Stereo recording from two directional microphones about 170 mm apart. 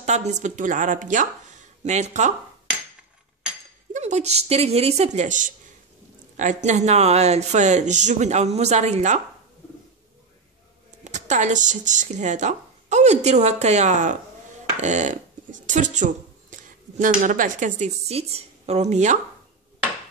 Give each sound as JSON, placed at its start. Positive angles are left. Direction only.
{"t": 0.0, "sound": "speech", "side_deg": -40}
{"t": 3.9, "sound": "speech", "side_deg": -40}
{"t": 11.1, "sound": "speech", "side_deg": -45}